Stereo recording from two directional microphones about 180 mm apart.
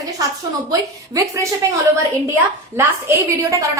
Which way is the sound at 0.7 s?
15° right (ahead or behind).